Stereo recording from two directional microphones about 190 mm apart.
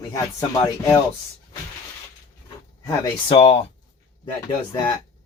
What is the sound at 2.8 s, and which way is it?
Speech, 30° left (ahead or behind).